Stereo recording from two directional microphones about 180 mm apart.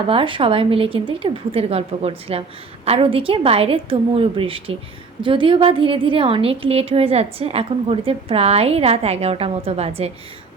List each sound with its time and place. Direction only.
0.1 s a woman's voice: 30° right (ahead or behind)